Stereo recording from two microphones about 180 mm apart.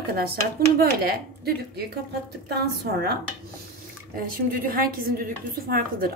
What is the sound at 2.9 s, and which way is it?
Speech, 60° right (ahead or behind).